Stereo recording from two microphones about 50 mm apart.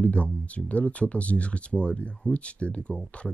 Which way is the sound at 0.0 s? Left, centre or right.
Left.